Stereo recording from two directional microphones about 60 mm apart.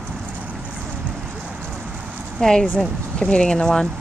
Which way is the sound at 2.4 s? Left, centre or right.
Centre.